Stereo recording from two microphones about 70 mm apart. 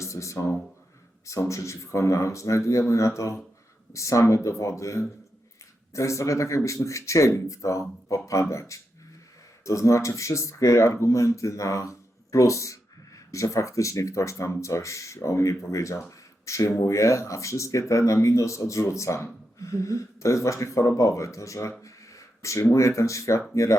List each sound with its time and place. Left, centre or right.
0.0 s speech: left